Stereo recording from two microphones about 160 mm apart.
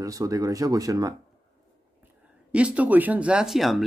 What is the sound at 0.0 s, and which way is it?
Speech, 20° right (ahead or behind).